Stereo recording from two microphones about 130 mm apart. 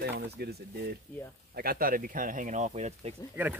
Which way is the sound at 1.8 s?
90° right.